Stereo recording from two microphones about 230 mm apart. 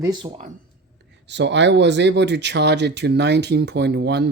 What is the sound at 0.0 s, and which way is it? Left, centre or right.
Speech, centre.